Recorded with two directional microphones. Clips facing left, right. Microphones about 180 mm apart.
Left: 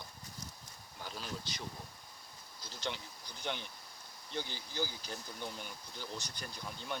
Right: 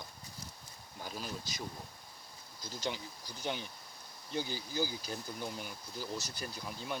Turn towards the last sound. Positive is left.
turn(degrees=-5)  # may be behind; listen again after turning